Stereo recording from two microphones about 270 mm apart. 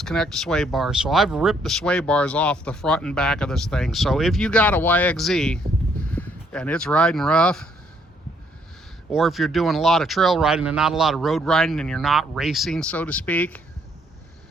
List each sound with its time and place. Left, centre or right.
0.0 s speech: centre
9.1 s speech: centre